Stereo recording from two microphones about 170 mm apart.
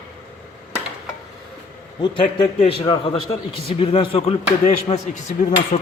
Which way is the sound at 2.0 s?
30° left (ahead or behind).